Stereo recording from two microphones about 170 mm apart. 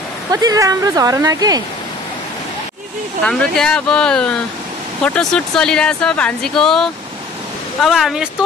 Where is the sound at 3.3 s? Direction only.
5° left (ahead or behind).